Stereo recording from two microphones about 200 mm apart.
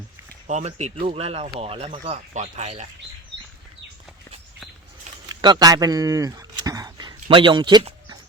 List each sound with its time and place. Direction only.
0.4 s speech: 35° right (ahead or behind)
5.3 s speech: 20° right (ahead or behind)